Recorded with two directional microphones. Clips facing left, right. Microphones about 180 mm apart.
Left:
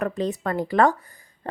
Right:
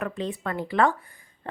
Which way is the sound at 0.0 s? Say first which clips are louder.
Left 5 dB; 40° left (ahead or behind).